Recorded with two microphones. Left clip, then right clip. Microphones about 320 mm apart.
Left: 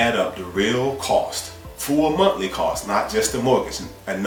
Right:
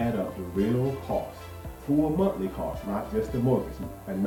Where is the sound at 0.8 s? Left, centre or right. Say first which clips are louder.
Left 10 dB; left.